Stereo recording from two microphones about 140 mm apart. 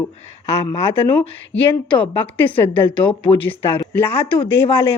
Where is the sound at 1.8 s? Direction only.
35° left (ahead or behind).